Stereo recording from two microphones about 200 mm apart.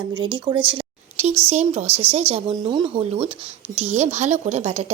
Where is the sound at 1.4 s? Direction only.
35° right (ahead or behind).